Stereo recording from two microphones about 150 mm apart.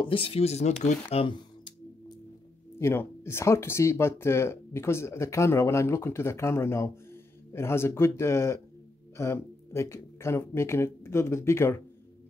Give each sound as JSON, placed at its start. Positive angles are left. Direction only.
{"t": 0.0, "sound": "speech", "side_deg": 35}
{"t": 2.8, "sound": "speech", "side_deg": 15}